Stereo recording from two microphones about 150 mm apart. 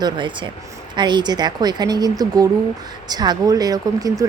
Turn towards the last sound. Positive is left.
turn(degrees=-25)  # may be behind; listen again after turning